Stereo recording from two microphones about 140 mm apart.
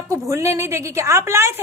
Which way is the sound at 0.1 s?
20° right (ahead or behind).